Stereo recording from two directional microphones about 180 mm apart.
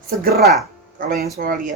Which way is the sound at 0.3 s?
60° right (ahead or behind).